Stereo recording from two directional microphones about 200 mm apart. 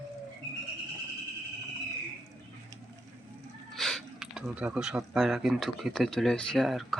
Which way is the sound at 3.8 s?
Centre (ahead or behind).